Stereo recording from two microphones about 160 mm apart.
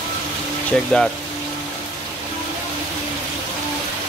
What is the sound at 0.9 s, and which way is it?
Speech, 5° left (ahead or behind).